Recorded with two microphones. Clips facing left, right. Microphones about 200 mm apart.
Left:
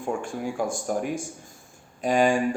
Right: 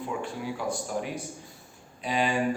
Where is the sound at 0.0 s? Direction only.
50° left (ahead or behind).